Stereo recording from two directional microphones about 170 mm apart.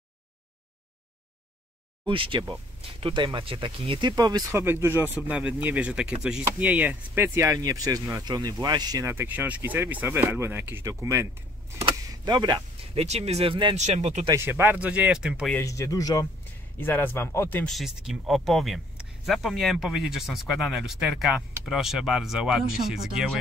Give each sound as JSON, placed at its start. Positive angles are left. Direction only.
{"t": 2.0, "sound": "speech", "side_deg": -30}
{"t": 11.9, "sound": "a sound", "side_deg": -25}
{"t": 13.0, "sound": "speech", "side_deg": -40}
{"t": 13.7, "sound": "speech", "side_deg": -45}
{"t": 14.3, "sound": "speech", "side_deg": -15}
{"t": 15.5, "sound": "speech", "side_deg": 20}
{"t": 17.7, "sound": "speech", "side_deg": 0}